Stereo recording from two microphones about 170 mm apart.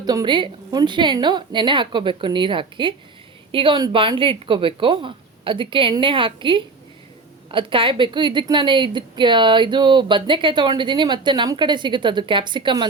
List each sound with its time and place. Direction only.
0.0 s a woman's voice: 25° right (ahead or behind)